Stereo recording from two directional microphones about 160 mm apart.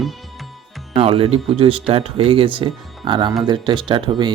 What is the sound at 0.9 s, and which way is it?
Speech, 35° right (ahead or behind).